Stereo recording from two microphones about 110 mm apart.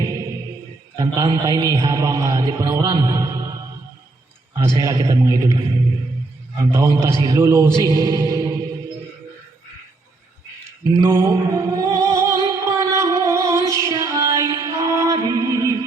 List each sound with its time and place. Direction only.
0.0 s music: 30° right (ahead or behind)
0.9 s a man's voice: 30° right (ahead or behind)
4.6 s a man's voice: 25° right (ahead or behind)
6.6 s a man's voice: 25° right (ahead or behind)
10.9 s music: 25° right (ahead or behind)